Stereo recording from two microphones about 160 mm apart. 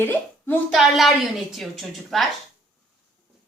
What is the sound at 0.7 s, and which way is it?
A woman's voice, centre (ahead or behind).